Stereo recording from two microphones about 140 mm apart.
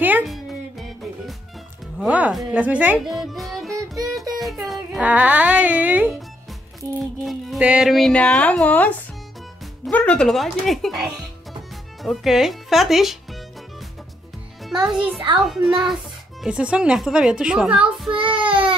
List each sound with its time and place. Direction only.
0.3 s music: centre (ahead or behind)
4.4 s a sound: centre (ahead or behind)
5.1 s speech: 10° right (ahead or behind)
7.2 s music: centre (ahead or behind)
7.6 s a child's voice: 5° right (ahead or behind)
14.6 s a child's voice: 5° right (ahead or behind)
18.1 s speech: 35° right (ahead or behind)